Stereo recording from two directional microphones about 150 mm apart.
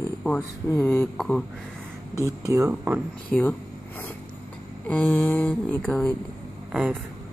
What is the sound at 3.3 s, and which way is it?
Speech, 10° left (ahead or behind).